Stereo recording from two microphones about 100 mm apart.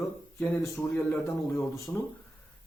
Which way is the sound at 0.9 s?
25° left (ahead or behind).